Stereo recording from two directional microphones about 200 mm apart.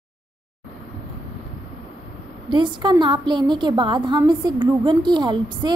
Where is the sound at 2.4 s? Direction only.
25° right (ahead or behind).